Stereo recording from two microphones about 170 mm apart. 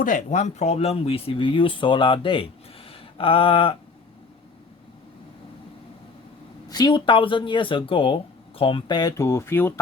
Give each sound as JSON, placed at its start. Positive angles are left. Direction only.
{"t": 0.0, "sound": "speech", "side_deg": 45}
{"t": 6.7, "sound": "speech", "side_deg": 25}